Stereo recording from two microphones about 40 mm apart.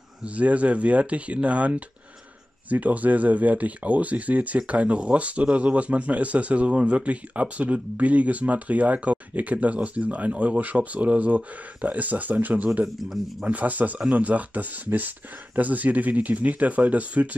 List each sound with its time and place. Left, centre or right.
0.2 s speech: right